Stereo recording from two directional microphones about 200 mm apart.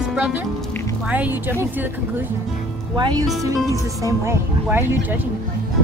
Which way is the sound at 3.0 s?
20° right (ahead or behind).